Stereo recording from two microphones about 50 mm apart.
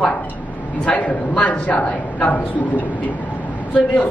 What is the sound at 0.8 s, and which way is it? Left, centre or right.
A woman's voice, left.